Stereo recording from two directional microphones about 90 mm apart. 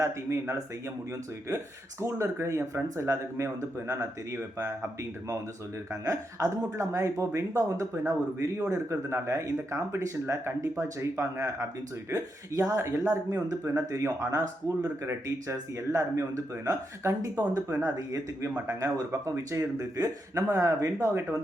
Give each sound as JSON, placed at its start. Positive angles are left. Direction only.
{"t": 0.0, "sound": "speech", "side_deg": -35}
{"t": 5.9, "sound": "speech", "side_deg": -35}
{"t": 15.0, "sound": "speech", "side_deg": -30}